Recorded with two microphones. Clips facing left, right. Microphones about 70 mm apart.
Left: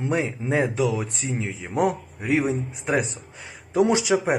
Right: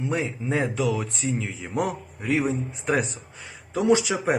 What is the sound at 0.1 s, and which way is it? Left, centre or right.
Rapping, centre.